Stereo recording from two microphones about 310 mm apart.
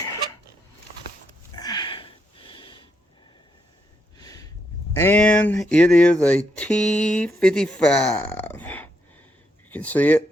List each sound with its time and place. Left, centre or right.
1.5 s wheeze: centre
4.2 s a sound: centre
4.9 s speech: centre